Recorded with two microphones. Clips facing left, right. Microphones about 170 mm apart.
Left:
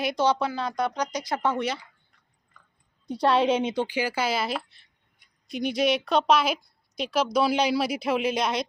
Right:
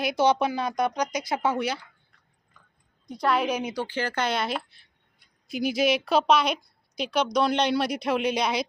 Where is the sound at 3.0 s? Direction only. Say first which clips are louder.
Left 3 dB; 30° left (ahead or behind).